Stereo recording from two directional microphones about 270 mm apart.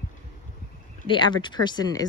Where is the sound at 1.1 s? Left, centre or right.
Centre.